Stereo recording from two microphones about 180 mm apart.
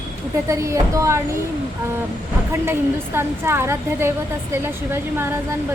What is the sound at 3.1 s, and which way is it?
A woman's voice, 15° right (ahead or behind).